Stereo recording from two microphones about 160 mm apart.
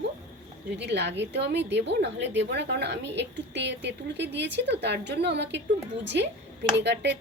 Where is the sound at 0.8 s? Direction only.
90° right.